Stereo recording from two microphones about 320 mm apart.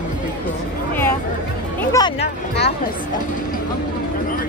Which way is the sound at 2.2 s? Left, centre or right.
Left.